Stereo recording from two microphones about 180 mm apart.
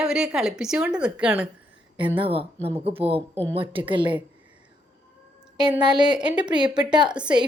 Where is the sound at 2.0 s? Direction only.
30° right (ahead or behind).